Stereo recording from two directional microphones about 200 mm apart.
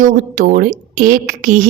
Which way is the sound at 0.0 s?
40° right (ahead or behind).